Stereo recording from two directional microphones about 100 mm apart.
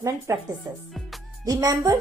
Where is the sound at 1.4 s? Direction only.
35° right (ahead or behind).